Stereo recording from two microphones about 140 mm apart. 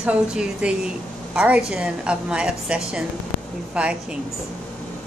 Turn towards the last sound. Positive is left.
turn(degrees=-10)  # may be behind; listen again after turning